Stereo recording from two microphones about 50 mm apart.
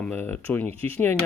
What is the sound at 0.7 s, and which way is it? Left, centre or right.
Speech, left.